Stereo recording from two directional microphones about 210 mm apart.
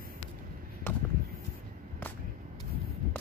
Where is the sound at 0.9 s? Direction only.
10° left (ahead or behind).